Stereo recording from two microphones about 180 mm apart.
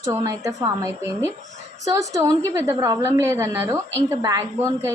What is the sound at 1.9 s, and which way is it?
A woman's voice, 20° right (ahead or behind).